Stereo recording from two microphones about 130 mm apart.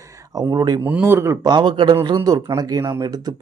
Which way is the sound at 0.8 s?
15° right (ahead or behind).